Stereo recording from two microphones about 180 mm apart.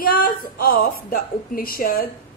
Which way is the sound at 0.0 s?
55° left (ahead or behind).